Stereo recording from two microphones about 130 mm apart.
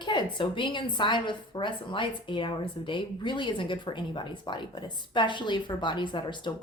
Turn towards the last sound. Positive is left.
turn(degrees=35)  # may be behind; listen again after turning